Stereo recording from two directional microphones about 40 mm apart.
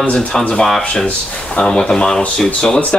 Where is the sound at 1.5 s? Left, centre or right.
Left.